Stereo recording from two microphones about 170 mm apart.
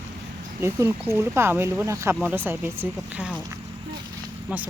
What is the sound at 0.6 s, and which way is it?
Speech, 15° right (ahead or behind).